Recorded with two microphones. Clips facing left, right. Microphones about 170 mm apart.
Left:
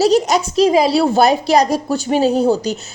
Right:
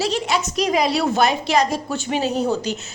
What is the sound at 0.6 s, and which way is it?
A woman's voice, 30° left (ahead or behind).